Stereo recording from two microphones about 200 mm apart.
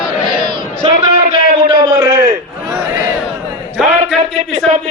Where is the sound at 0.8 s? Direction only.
25° right (ahead or behind).